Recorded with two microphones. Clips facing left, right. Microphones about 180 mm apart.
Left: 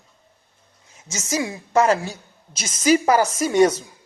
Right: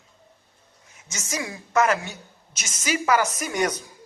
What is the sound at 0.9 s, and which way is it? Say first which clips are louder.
A man's voice: left 7 dB; 25° left (ahead or behind).